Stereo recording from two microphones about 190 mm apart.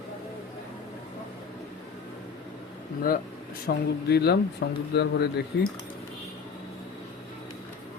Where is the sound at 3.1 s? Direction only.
50° left (ahead or behind).